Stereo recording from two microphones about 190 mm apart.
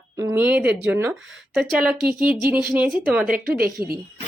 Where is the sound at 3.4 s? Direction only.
50° right (ahead or behind).